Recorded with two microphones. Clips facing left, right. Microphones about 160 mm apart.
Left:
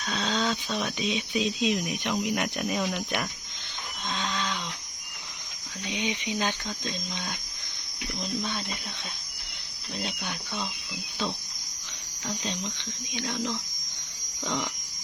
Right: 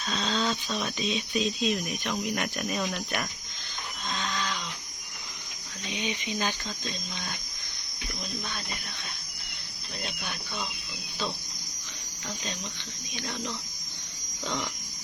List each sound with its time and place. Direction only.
0.0 s speech: 10° left (ahead or behind)
4.1 s a sound: centre (ahead or behind)
5.9 s speech: 20° left (ahead or behind)
8.4 s speech: 15° left (ahead or behind)
10.0 s speech: 15° left (ahead or behind)
12.3 s speech: 20° left (ahead or behind)
14.4 s speech: 15° left (ahead or behind)